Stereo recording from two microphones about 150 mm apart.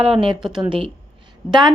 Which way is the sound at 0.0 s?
40° right (ahead or behind).